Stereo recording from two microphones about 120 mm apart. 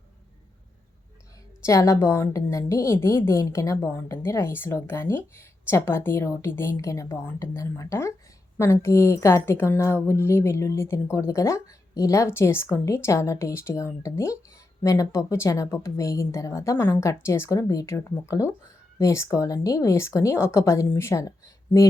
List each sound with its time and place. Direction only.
1.6 s a woman's voice: 25° left (ahead or behind)